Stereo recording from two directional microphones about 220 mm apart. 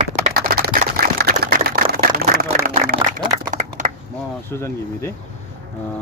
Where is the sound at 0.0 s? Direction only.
40° right (ahead or behind).